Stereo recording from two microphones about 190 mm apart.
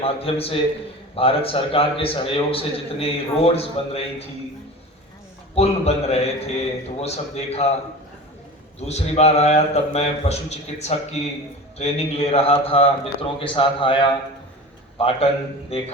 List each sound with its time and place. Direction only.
0.0 s a man's voice: 30° left (ahead or behind)
5.5 s a man's voice: 35° left (ahead or behind)
8.8 s a man's voice: 35° left (ahead or behind)